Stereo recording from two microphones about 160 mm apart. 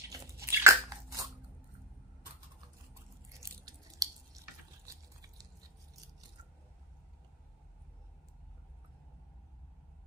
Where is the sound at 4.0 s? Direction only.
20° right (ahead or behind).